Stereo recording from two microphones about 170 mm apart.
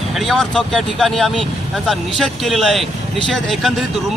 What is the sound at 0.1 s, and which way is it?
A man's voice, centre (ahead or behind).